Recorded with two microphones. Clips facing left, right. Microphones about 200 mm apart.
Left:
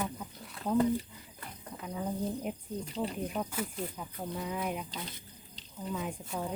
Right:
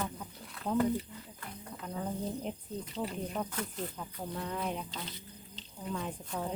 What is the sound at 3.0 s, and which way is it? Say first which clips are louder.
Speech: left 2 dB; 5° left (ahead or behind).